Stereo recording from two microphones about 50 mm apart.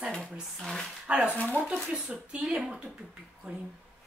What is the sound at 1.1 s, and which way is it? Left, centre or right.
A woman's voice, right.